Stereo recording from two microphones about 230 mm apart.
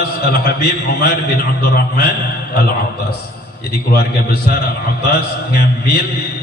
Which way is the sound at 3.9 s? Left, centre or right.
Left.